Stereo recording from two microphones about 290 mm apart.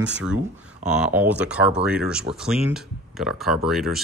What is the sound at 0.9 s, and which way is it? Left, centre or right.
Speech, centre.